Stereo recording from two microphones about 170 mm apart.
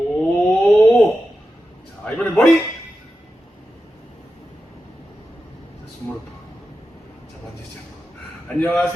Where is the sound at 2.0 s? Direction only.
5° left (ahead or behind).